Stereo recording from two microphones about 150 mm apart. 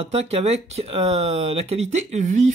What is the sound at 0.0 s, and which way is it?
Speech, 45° right (ahead or behind).